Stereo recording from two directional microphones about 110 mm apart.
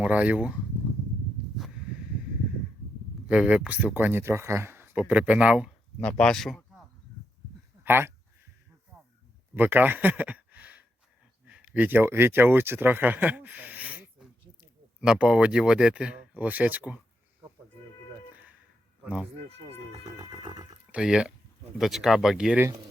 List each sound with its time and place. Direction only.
0.0 s speech: 10° right (ahead or behind)
3.2 s speech: 10° right (ahead or behind)
6.0 s speech: 10° left (ahead or behind)
7.9 s speech: 20° right (ahead or behind)
9.6 s speech: 20° right (ahead or behind)
20.1 s music: 40° right (ahead or behind)
20.9 s speech: 5° right (ahead or behind)